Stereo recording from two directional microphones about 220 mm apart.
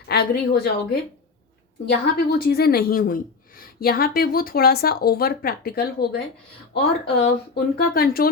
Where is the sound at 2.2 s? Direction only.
45° left (ahead or behind).